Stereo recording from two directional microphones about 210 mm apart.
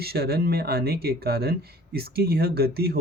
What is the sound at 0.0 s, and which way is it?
Speech, 50° right (ahead or behind).